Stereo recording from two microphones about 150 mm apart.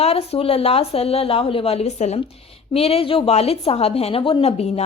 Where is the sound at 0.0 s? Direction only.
40° left (ahead or behind).